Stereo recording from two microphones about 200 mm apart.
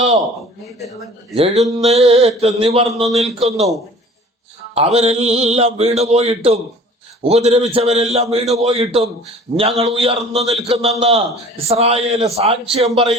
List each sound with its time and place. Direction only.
1.9 s a man's voice: 30° right (ahead or behind)
4.7 s a man's voice: 30° right (ahead or behind)